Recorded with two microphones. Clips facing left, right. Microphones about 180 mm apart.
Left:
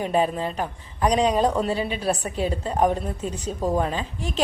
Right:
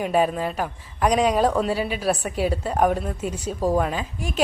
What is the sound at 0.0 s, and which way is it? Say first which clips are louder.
A woman's voice: right 1 dB; 10° right (ahead or behind).